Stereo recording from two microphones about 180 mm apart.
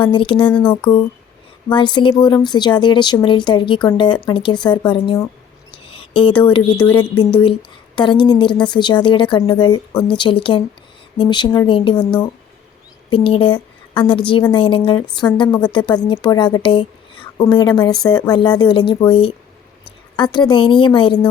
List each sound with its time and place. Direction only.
0.0 s speech: 25° left (ahead or behind)
0.4 s speech: 5° left (ahead or behind)
0.7 s speech: 30° left (ahead or behind)
5.8 s a sound: 30° left (ahead or behind)
6.9 s speech: 30° left (ahead or behind)
13.1 s a woman's voice: 30° left (ahead or behind)